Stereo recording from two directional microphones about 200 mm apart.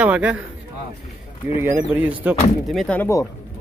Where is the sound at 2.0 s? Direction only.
10° right (ahead or behind).